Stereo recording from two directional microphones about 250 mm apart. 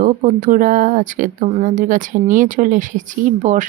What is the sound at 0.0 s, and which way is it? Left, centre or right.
Speech, right.